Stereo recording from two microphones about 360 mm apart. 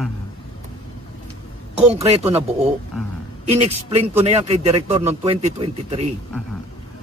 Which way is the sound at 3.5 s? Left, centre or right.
Centre.